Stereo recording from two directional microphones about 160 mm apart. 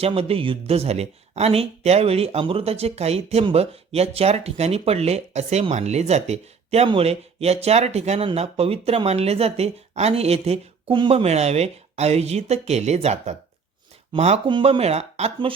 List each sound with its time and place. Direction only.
0.0 s speech: 35° right (ahead or behind)